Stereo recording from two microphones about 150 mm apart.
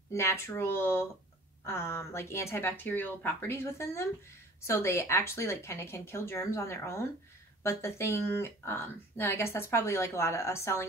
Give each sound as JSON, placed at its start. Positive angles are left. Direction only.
{"t": 0.1, "sound": "a woman's voice", "side_deg": 15}